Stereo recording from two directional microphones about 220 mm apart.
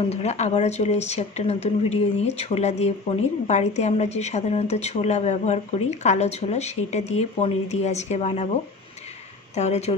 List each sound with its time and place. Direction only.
0.1 s a woman's voice: 30° left (ahead or behind)
9.6 s speech: 30° left (ahead or behind)